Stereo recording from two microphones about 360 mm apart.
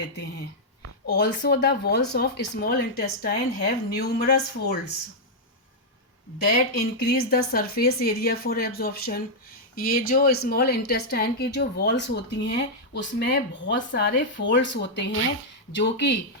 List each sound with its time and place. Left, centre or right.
1.0 s a woman's voice: left
7.0 s a woman's voice: left